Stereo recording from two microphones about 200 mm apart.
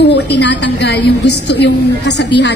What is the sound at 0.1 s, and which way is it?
A woman's voice, 60° left (ahead or behind).